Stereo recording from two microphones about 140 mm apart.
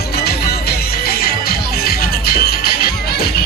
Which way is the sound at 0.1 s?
90° left.